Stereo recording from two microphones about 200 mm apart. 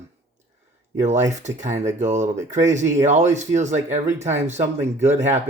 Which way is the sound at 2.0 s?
35° right (ahead or behind).